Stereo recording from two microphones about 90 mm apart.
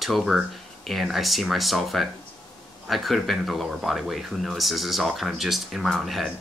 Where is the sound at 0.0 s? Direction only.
Centre (ahead or behind).